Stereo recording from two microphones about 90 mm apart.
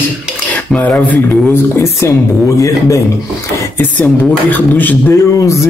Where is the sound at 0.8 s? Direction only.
15° left (ahead or behind).